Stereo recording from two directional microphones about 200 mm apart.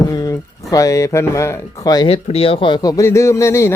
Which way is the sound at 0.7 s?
15° left (ahead or behind).